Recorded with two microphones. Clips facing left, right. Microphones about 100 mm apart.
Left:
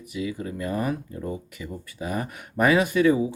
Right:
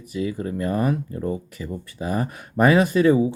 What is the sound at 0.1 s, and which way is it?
Speech, 35° right (ahead or behind).